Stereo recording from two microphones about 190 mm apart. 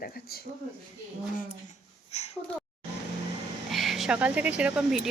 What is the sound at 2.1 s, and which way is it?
Speech, 35° left (ahead or behind).